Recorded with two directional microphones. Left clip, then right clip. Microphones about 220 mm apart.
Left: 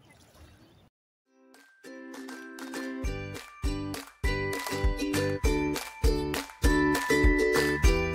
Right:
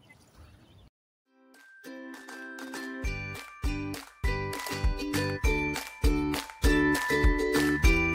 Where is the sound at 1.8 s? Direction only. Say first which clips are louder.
Left 1 dB; 5° left (ahead or behind).